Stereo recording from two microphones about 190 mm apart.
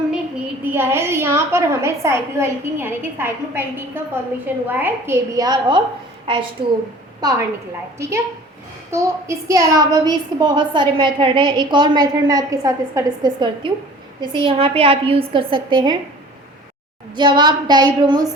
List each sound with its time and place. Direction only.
0.7 s a woman's voice: 10° right (ahead or behind)
8.9 s speech: 15° right (ahead or behind)
17.2 s speech: 25° right (ahead or behind)